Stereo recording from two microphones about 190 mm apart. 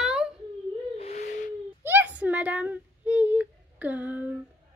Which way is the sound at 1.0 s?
35° left (ahead or behind).